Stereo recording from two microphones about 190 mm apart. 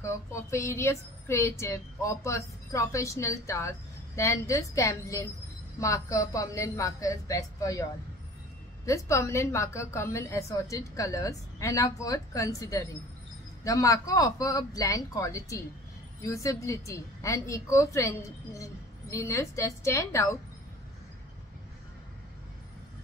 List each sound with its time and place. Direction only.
0.0 s speech: 15° left (ahead or behind)
8.8 s speech: 15° left (ahead or behind)